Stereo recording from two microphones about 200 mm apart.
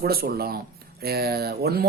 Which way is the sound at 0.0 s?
50° right (ahead or behind).